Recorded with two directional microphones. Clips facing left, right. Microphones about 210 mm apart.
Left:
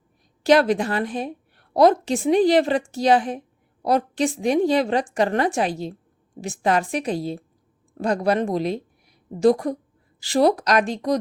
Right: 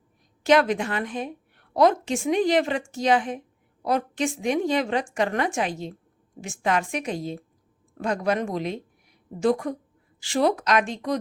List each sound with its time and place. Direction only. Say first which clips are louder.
0.4 s a woman's voice: left 3 dB; 35° left (ahead or behind)